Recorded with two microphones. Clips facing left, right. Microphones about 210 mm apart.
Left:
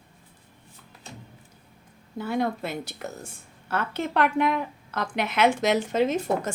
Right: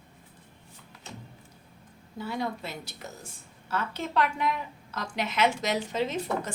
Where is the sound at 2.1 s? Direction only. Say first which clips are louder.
Left 6 dB; 55° left (ahead or behind).